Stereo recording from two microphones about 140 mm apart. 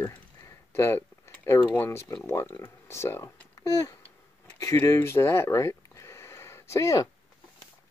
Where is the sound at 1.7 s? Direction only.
15° left (ahead or behind).